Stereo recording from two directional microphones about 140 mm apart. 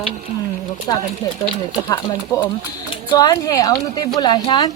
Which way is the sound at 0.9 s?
30° left (ahead or behind).